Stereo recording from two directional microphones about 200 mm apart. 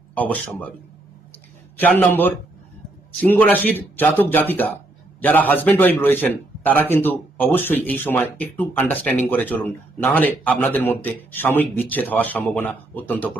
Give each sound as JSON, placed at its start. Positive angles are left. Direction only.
{"t": 0.1, "sound": "a man's voice", "side_deg": 5}
{"t": 1.8, "sound": "a man's voice", "side_deg": 10}